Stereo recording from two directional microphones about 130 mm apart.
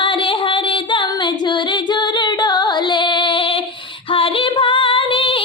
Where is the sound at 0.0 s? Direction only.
40° left (ahead or behind).